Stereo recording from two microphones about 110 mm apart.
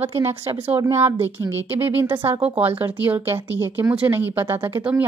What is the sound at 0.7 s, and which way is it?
Speech, 25° right (ahead or behind).